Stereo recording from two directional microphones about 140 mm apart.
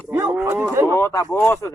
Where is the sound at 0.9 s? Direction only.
20° left (ahead or behind).